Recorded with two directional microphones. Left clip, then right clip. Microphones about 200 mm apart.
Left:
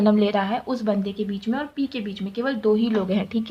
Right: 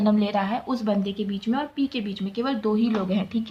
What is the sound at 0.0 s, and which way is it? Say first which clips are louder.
Speech: left 3 dB; 25° left (ahead or behind).